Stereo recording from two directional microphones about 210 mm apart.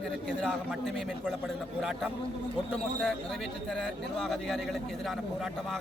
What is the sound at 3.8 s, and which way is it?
A man's voice, centre (ahead or behind).